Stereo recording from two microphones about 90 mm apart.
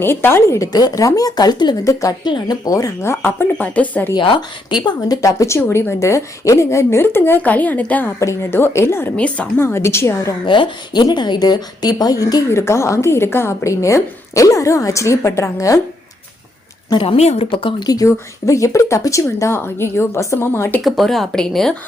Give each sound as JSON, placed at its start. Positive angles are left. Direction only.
{"t": 0.0, "sound": "a woman's voice", "side_deg": 25}
{"t": 0.7, "sound": "a woman's voice", "side_deg": 50}
{"t": 1.9, "sound": "a woman's voice", "side_deg": 40}
{"t": 2.2, "sound": "speech", "side_deg": 55}
{"t": 2.6, "sound": "a woman's voice", "side_deg": 40}
{"t": 4.1, "sound": "a woman's voice", "side_deg": 60}
{"t": 8.2, "sound": "a woman's voice", "side_deg": 30}
{"t": 9.1, "sound": "speech", "side_deg": 15}
{"t": 9.6, "sound": "a woman's voice", "side_deg": 25}
{"t": 10.4, "sound": "a woman's voice", "side_deg": 65}
{"t": 12.5, "sound": "a woman's voice", "side_deg": 30}
{"t": 16.9, "sound": "speech", "side_deg": 75}
{"t": 17.8, "sound": "a woman's voice", "side_deg": 40}
{"t": 20.8, "sound": "speech", "side_deg": 0}